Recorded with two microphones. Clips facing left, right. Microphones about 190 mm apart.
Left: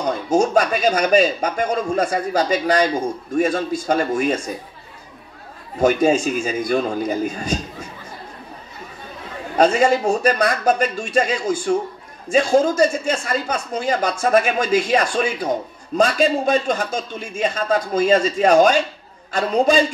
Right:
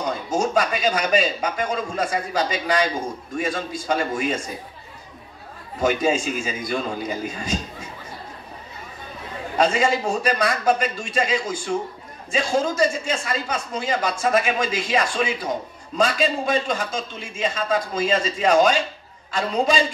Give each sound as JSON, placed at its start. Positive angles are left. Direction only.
{"t": 0.3, "sound": "speech", "side_deg": 45}
{"t": 5.8, "sound": "speech", "side_deg": 45}
{"t": 9.6, "sound": "speech", "side_deg": 45}